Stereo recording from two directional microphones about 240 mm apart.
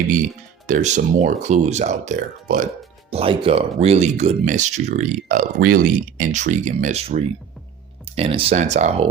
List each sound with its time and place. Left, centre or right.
0.7 s speech: right